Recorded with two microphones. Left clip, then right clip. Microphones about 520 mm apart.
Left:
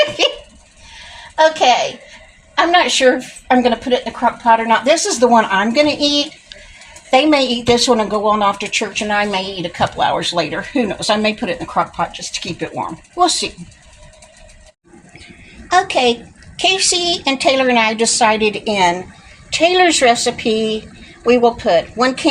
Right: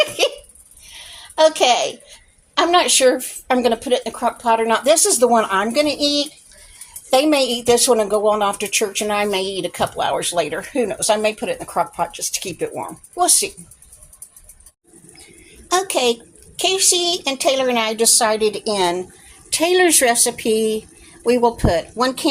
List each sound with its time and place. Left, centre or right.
1.4 s a child's voice: right
15.7 s a woman's voice: right